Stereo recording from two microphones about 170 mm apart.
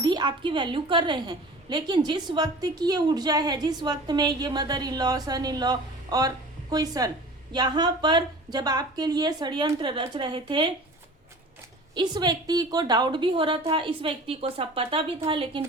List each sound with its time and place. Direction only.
0.0 s a woman's voice: 25° right (ahead or behind)
11.9 s a woman's voice: 25° right (ahead or behind)